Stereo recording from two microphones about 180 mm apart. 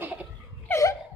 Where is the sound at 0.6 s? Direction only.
15° left (ahead or behind).